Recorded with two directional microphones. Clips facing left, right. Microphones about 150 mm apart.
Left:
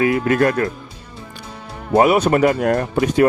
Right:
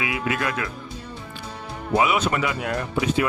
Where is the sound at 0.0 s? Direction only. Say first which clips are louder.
Left 10 dB; 45° left (ahead or behind).